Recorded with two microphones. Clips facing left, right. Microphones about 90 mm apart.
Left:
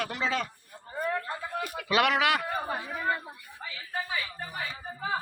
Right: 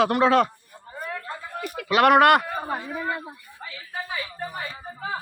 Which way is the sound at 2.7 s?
5° right (ahead or behind).